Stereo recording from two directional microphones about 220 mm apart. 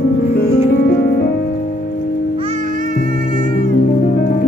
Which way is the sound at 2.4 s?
30° right (ahead or behind).